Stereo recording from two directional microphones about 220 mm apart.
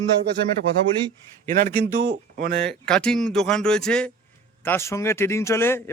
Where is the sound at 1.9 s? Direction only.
55° right (ahead or behind).